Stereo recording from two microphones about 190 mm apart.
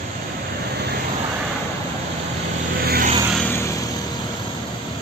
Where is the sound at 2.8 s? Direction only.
55° right (ahead or behind).